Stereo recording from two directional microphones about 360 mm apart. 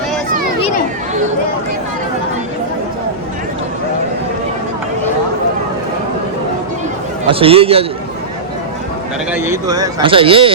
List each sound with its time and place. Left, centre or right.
7.3 s speech: centre
9.3 s speech: centre